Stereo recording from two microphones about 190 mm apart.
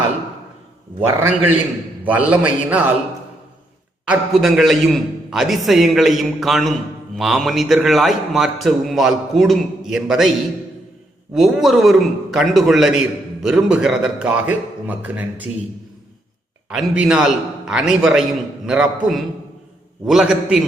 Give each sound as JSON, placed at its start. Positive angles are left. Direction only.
{"t": 1.0, "sound": "a man's voice", "side_deg": -10}
{"t": 4.0, "sound": "a man's voice", "side_deg": -5}
{"t": 11.3, "sound": "a man's voice", "side_deg": 0}
{"t": 16.6, "sound": "a man's voice", "side_deg": -5}